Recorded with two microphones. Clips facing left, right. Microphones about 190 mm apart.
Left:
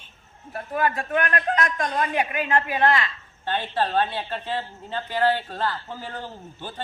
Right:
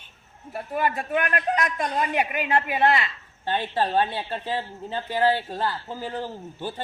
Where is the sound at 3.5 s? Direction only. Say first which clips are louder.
Even; 15° right (ahead or behind).